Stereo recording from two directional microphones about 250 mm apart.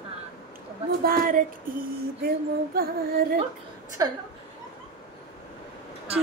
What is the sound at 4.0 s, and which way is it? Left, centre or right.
Speech, centre.